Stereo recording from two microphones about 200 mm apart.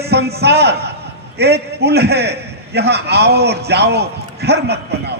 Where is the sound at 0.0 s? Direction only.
55° right (ahead or behind).